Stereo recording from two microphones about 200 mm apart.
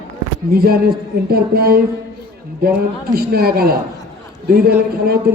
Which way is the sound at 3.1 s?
50° right (ahead or behind).